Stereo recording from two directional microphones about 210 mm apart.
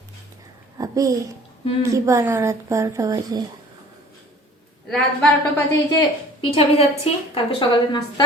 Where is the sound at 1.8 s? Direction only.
15° right (ahead or behind).